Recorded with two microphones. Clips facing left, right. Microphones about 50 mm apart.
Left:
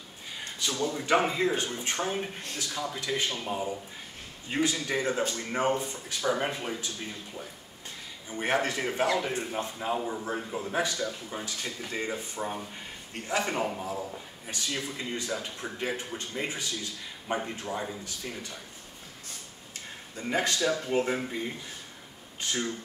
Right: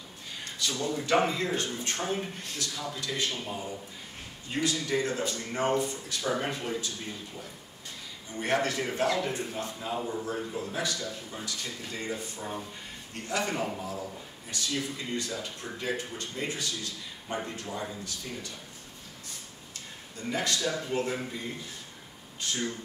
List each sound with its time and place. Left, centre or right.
0.6 s speech: centre
8.3 s speech: centre; by 12.5 s left
13.3 s speech: centre
14.5 s speech: left
20.2 s speech: left